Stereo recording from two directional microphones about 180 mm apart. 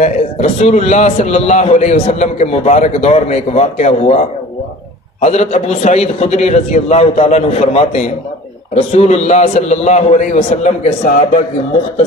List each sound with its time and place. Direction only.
0.0 s a man's voice: 40° left (ahead or behind)